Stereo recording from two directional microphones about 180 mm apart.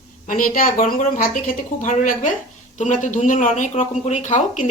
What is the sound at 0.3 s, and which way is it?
Speech, 50° left (ahead or behind).